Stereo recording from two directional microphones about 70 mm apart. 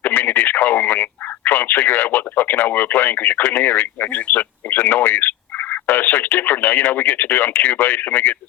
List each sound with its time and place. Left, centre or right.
0.0 s radio: left
1.5 s speech: left